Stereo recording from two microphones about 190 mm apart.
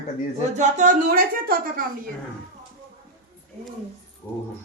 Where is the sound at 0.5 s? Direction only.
40° right (ahead or behind).